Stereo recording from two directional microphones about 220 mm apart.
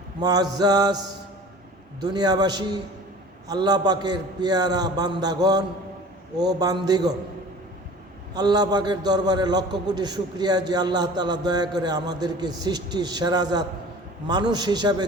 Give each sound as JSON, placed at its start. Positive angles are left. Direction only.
{"t": 0.2, "sound": "a man's voice", "side_deg": -15}
{"t": 2.0, "sound": "a man's voice", "side_deg": -20}
{"t": 8.3, "sound": "a man's voice", "side_deg": -20}